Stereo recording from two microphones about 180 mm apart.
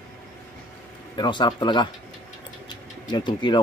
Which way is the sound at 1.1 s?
25° left (ahead or behind).